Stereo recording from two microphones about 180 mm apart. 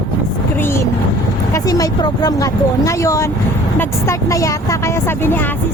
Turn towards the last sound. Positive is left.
turn(degrees=20)  # may be behind; listen again after turning